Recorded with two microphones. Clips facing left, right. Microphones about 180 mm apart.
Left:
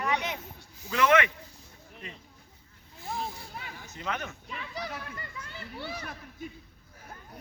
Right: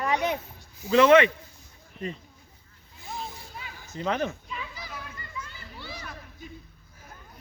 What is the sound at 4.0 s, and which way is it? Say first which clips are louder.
Speech: right 8 dB; 30° right (ahead or behind).